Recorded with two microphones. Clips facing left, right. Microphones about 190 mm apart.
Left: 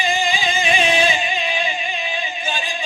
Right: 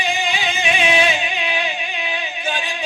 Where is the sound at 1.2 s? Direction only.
65° right (ahead or behind).